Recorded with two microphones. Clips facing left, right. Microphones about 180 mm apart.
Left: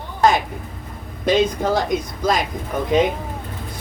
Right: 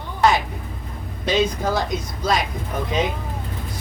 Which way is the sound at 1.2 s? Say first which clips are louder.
Left 3 dB; 50° left (ahead or behind).